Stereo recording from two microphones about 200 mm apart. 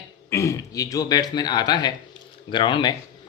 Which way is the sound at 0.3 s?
15° left (ahead or behind).